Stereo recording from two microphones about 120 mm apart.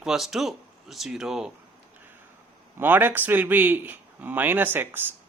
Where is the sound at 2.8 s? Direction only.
15° right (ahead or behind).